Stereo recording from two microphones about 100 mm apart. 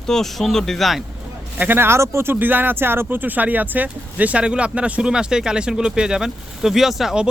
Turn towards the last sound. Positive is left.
turn(degrees=-5)  # may be behind; listen again after turning